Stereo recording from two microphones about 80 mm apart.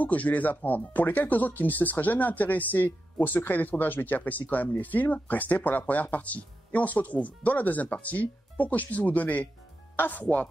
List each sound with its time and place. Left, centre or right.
0.0 s speech: centre